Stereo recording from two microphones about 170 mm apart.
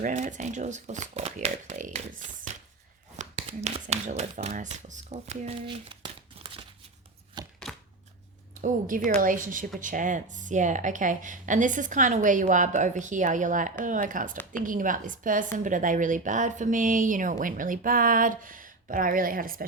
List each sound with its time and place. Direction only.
0.0 s a woman's voice: 45° right (ahead or behind)
3.2 s speech: 40° right (ahead or behind)
6.4 s crumpling: 35° right (ahead or behind)
7.4 s chopping: 25° right (ahead or behind)
9.0 s a woman's voice: 50° right (ahead or behind)